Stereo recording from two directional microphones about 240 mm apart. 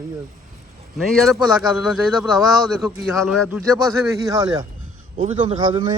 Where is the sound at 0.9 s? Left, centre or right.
Centre.